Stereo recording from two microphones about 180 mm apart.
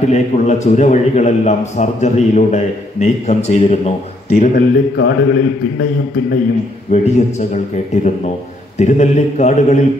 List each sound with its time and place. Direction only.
0.1 s a man's voice: 40° left (ahead or behind)
4.9 s a man's voice: 70° left (ahead or behind)
6.9 s a man's voice: 40° left (ahead or behind)